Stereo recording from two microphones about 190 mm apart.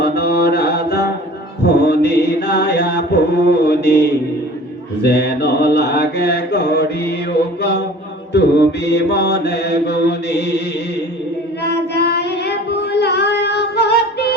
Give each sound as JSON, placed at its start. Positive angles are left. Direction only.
{"t": 0.0, "sound": "mantra", "side_deg": 55}
{"t": 1.8, "sound": "chant", "side_deg": 60}
{"t": 5.0, "sound": "mantra", "side_deg": 60}
{"t": 11.6, "sound": "singing", "side_deg": 60}